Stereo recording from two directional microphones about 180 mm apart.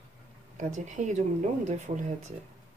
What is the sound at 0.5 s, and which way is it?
Speech, 40° right (ahead or behind).